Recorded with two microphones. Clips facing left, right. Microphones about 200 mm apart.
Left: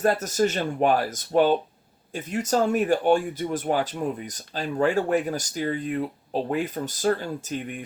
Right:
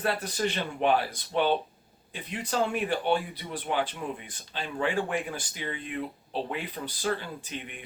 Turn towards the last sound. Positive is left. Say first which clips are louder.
# left 8 dB
turn(degrees=45)  # may be behind; listen again after turning